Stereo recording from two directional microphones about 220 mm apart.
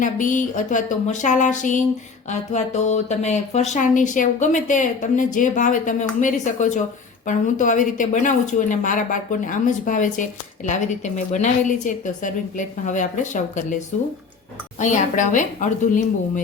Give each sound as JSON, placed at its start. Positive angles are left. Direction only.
{"t": 0.0, "sound": "a woman's voice", "side_deg": 35}